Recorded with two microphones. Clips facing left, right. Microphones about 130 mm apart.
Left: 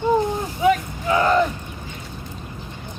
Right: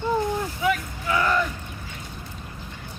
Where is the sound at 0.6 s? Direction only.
30° left (ahead or behind).